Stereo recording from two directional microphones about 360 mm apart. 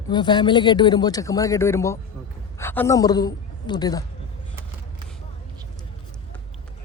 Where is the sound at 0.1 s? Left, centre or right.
Centre.